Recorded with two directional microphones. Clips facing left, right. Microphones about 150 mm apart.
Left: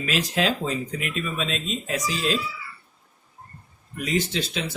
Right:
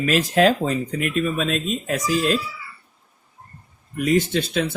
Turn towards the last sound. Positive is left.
turn(degrees=-50)  # may be behind; listen again after turning